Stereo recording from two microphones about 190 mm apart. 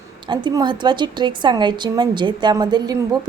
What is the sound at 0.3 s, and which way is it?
A woman's voice, 25° right (ahead or behind).